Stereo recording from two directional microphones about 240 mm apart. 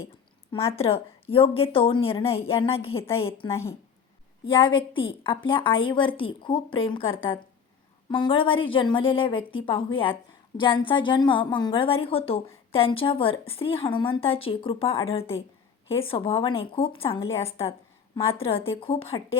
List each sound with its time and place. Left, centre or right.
0.5 s a woman's voice: left
8.1 s a woman's voice: left
17.2 s a woman's voice: centre
17.7 s a woman's voice: left